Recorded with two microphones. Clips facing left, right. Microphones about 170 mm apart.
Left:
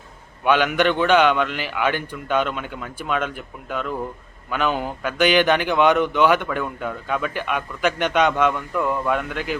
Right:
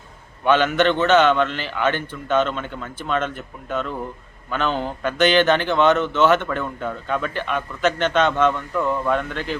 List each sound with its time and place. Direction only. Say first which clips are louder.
0.4 s a man's voice: right 1 dB; 10° left (ahead or behind)